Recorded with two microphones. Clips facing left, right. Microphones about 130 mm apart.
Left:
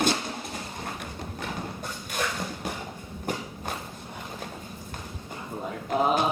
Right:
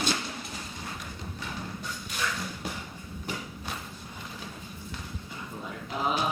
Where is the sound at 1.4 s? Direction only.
55° left (ahead or behind).